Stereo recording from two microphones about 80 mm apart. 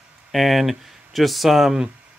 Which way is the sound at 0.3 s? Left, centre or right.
Centre.